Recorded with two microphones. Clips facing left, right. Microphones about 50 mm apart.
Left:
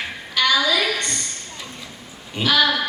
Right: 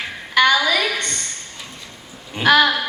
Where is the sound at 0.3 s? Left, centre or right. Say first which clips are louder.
Right 3 dB; right.